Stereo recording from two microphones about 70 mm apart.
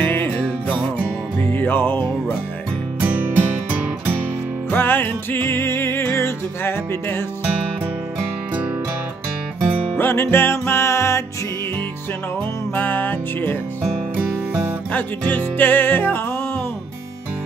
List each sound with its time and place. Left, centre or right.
0.0 s music: left
0.3 s music: centre
1.5 s music: left
3.0 s music: right
4.6 s music: left
9.9 s music: left
12.7 s music: left
14.9 s music: left